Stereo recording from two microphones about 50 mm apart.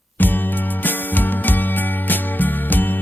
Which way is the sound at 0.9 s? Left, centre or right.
Left.